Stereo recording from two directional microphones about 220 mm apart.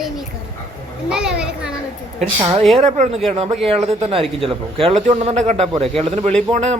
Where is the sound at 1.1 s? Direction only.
5° right (ahead or behind).